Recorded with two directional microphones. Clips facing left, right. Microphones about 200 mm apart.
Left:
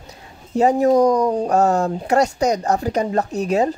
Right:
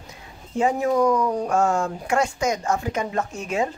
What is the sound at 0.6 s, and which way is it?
Speech, 40° left (ahead or behind).